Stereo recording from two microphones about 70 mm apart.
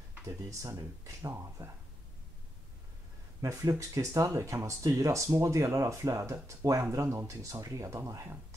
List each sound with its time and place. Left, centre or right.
0.4 s speech: right
3.3 s speech: right